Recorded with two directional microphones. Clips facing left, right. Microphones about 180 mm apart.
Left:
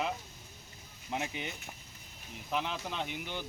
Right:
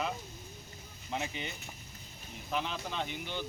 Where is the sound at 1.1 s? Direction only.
10° left (ahead or behind).